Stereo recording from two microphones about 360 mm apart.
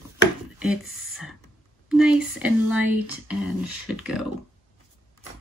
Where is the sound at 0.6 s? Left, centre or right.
Centre.